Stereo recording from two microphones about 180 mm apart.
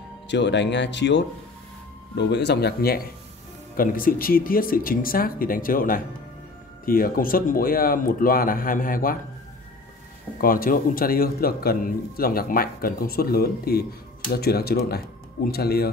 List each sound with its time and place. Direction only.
0.3 s a man's voice: 75° left (ahead or behind)
3.7 s speech: 50° left (ahead or behind)
10.4 s a man's voice: 50° left (ahead or behind)